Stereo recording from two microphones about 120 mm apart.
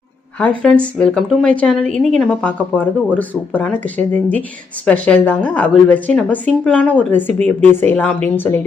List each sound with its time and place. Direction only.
0.3 s a woman's voice: 10° left (ahead or behind)